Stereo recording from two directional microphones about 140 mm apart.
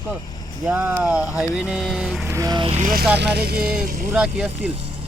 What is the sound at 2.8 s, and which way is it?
Speech, 90° right.